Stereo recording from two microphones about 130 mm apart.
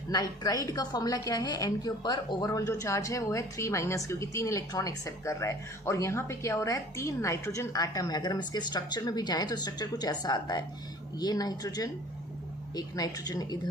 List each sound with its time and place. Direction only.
0.1 s a woman's voice: 30° left (ahead or behind)